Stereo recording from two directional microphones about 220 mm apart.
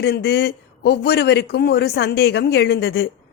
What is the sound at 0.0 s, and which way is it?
A woman's voice, 45° left (ahead or behind).